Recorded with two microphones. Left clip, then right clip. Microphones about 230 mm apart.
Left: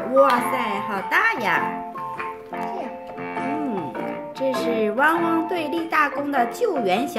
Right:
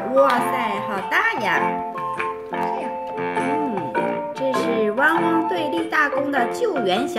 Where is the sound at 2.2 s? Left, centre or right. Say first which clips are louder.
Right 5 dB; right.